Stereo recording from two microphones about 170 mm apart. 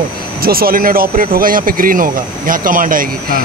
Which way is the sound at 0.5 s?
60° right (ahead or behind).